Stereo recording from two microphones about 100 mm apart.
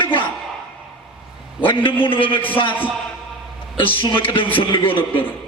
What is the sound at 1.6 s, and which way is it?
Speech, 60° left (ahead or behind).